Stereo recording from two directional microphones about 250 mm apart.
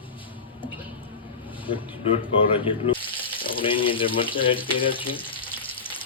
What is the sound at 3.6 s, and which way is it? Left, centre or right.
Frying, left.